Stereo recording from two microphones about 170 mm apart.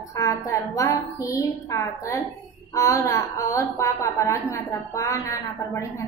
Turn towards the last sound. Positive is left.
turn(degrees=20)  # may be behind; listen again after turning